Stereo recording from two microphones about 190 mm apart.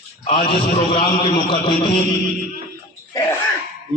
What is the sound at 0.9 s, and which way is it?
Speech, 25° left (ahead or behind).